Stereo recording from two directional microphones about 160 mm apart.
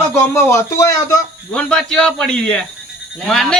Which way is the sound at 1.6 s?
5° left (ahead or behind).